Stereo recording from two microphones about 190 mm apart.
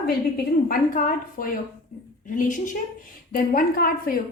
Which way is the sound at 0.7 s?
50° left (ahead or behind).